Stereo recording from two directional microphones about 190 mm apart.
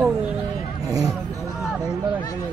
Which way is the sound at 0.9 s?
20° right (ahead or behind).